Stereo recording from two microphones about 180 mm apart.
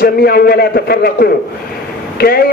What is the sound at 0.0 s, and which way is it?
A man's voice, 60° left (ahead or behind).